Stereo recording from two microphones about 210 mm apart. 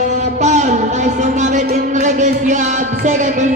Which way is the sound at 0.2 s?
35° right (ahead or behind).